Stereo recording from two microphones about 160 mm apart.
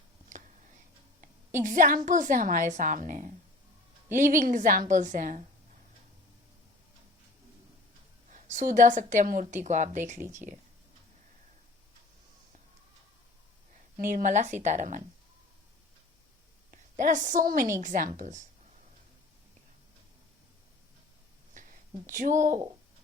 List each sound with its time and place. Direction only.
1.6 s a woman's voice: 55° right (ahead or behind)
8.3 s a woman's voice: 50° right (ahead or behind)
10.4 s speech: 5° right (ahead or behind)
14.0 s a woman's voice: 55° right (ahead or behind)
16.7 s a woman's voice: 55° right (ahead or behind)
21.5 s a sound: 55° right (ahead or behind)